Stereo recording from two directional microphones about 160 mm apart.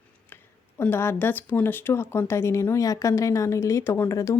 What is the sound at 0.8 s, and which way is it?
A woman's voice, 15° left (ahead or behind).